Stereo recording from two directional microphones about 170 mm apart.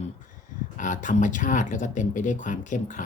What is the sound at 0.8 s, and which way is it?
Speech, 50° left (ahead or behind).